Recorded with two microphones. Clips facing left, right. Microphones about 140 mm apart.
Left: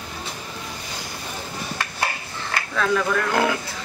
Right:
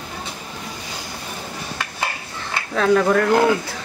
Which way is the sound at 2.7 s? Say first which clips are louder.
Right 6 dB; 40° right (ahead or behind).